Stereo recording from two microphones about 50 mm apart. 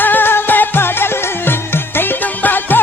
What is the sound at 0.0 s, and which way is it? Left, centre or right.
Music, left.